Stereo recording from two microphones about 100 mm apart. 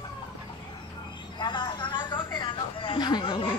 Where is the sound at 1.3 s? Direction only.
50° left (ahead or behind).